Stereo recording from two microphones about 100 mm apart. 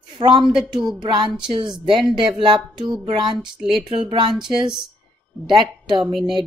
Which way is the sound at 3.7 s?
65° right (ahead or behind).